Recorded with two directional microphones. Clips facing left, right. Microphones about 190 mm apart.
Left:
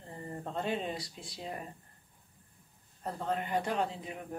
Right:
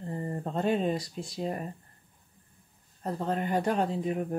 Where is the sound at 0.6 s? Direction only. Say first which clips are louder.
Right 8 dB; 45° right (ahead or behind).